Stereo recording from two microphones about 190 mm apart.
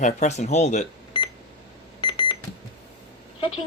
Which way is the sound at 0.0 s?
40° left (ahead or behind).